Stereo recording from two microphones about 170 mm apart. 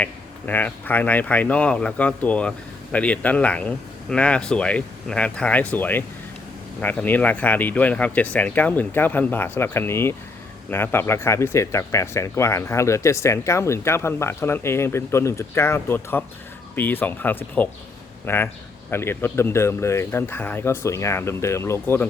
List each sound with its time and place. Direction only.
0.0 s speech: 10° left (ahead or behind)